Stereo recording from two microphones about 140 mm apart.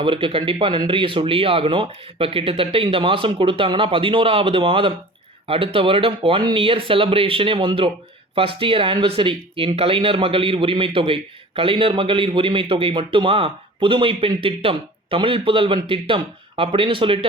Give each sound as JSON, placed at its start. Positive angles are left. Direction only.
{"t": 0.0, "sound": "speech", "side_deg": -35}